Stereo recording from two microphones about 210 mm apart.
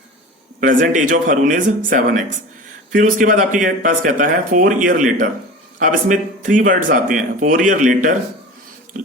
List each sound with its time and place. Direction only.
0.6 s speech: 40° right (ahead or behind)